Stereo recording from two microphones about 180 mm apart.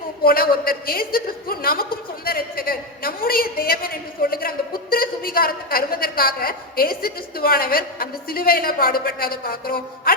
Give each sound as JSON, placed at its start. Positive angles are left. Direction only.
{"t": 0.2, "sound": "a woman's voice", "side_deg": 55}